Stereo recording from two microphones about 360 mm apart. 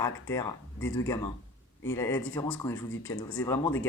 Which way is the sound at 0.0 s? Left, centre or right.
Centre.